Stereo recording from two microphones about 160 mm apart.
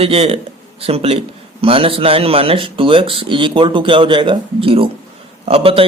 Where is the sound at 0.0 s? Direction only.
40° right (ahead or behind).